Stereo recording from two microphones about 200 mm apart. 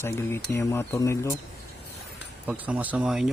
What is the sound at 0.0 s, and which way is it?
Speech, 10° left (ahead or behind).